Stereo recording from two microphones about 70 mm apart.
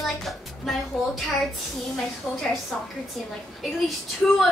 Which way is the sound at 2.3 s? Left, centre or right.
Centre.